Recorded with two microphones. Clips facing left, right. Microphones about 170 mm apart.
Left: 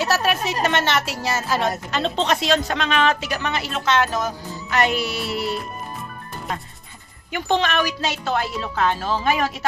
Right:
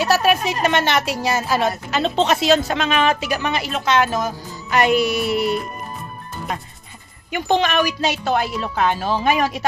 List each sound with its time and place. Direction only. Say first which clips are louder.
0.0 s a woman's voice: right 4 dB; 15° right (ahead or behind)
7.3 s a woman's voice: right 3 dB; 15° right (ahead or behind)